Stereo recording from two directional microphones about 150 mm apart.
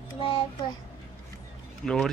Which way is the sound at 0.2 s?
35° left (ahead or behind).